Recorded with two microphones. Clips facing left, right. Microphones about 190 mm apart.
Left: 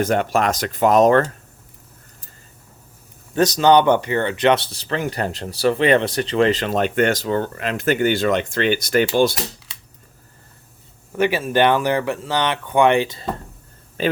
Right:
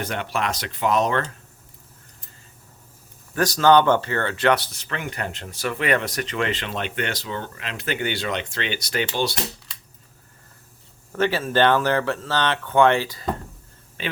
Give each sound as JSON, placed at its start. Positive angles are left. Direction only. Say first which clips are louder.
{"t": 0.0, "sound": "speech", "louder": "left 8 dB", "side_deg": 45}
{"t": 3.3, "sound": "speech", "louder": "left 2 dB", "side_deg": 20}
{"t": 11.2, "sound": "speech", "louder": "left 2 dB", "side_deg": 15}
{"t": 14.0, "sound": "speech", "louder": "left 10 dB", "side_deg": 40}